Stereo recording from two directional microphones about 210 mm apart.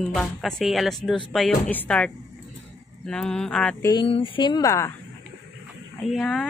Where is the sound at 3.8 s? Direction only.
20° left (ahead or behind).